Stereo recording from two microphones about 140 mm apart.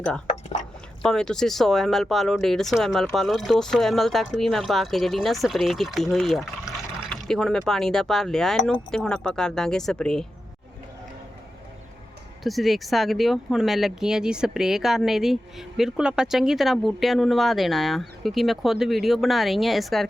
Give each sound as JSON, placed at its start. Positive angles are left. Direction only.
{"t": 1.0, "sound": "speech", "side_deg": 5}
{"t": 12.4, "sound": "speech", "side_deg": 0}